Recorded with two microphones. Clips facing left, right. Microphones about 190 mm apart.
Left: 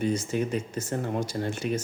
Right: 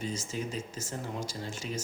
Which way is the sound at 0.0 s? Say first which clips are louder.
Left 9 dB; 60° left (ahead or behind).